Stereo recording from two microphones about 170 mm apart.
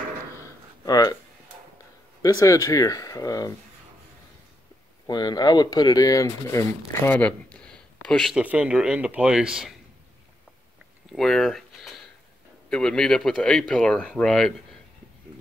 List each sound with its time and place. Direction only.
0.4 s a sound: 20° left (ahead or behind)
2.2 s speech: 20° left (ahead or behind)
5.0 s speech: 25° left (ahead or behind); by 9.8 s 5° right (ahead or behind)
11.1 s speech: centre (ahead or behind)